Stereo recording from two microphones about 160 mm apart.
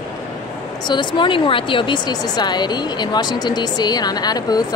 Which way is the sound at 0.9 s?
30° left (ahead or behind).